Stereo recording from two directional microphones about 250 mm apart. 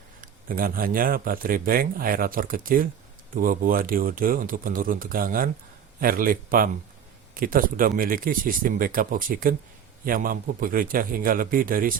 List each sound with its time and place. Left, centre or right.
0.2 s speech: right